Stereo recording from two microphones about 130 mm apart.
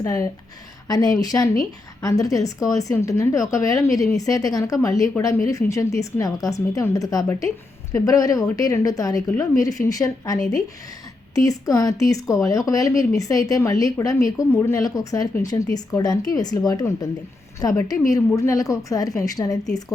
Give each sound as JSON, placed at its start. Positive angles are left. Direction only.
{"t": 0.0, "sound": "a woman's voice", "side_deg": 25}